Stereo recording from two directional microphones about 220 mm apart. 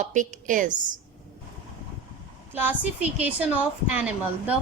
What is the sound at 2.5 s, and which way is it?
A woman's voice, 10° right (ahead or behind).